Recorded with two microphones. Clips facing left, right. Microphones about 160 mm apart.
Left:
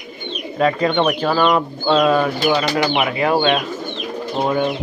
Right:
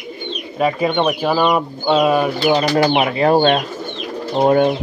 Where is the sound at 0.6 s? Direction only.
10° right (ahead or behind).